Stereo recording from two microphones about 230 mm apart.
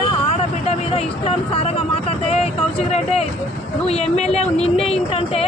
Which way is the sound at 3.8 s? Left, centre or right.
Left.